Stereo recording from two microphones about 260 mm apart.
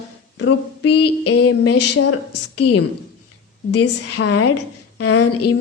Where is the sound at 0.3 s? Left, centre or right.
Left.